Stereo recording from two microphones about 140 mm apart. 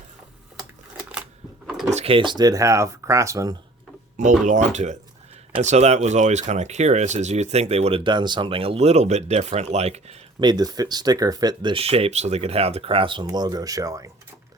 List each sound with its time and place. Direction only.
1.6 s drawer open or close: centre (ahead or behind)
1.9 s speech: 45° right (ahead or behind); by 3.5 s 20° right (ahead or behind)
4.2 s speech: 60° right (ahead or behind)
10.4 s speech: 30° right (ahead or behind)